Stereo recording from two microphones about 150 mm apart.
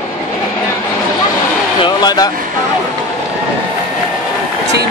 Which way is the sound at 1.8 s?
25° left (ahead or behind).